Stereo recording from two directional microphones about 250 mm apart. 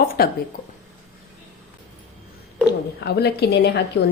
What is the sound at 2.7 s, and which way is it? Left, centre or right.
A woman's voice, left.